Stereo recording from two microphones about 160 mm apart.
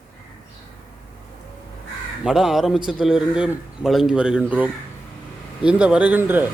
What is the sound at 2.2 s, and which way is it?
A man's voice, 5° right (ahead or behind).